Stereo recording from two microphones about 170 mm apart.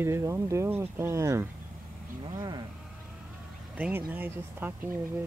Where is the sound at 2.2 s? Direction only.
25° right (ahead or behind).